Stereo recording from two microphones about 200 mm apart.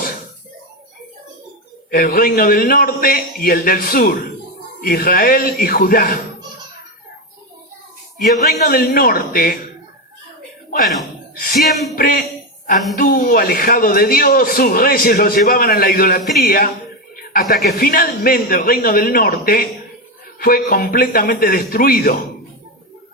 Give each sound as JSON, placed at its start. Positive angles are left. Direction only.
{"t": 1.9, "sound": "speech", "side_deg": 45}
{"t": 8.5, "sound": "speech", "side_deg": 45}
{"t": 11.5, "sound": "a sound", "side_deg": 0}
{"t": 11.9, "sound": "speech", "side_deg": 45}